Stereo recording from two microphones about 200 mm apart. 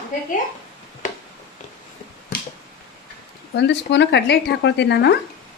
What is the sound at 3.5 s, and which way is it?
Speech, 60° left (ahead or behind).